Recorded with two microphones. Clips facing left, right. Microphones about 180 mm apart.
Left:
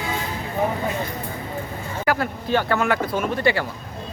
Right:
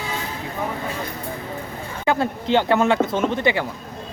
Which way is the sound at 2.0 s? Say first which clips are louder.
Right 2 dB; 25° right (ahead or behind).